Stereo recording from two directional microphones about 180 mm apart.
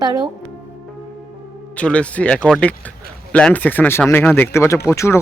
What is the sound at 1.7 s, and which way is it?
Speech, 5° left (ahead or behind).